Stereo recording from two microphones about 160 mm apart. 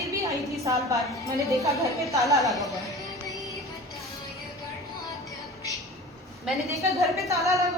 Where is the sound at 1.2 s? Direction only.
20° left (ahead or behind).